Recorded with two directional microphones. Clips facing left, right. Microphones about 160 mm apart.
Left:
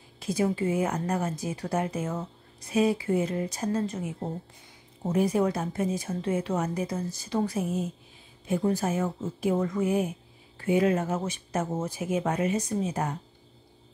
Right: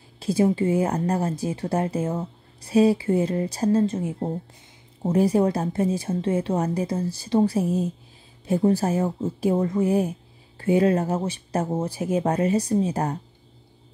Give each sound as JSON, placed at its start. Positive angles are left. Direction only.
{"t": 0.2, "sound": "speech", "side_deg": -30}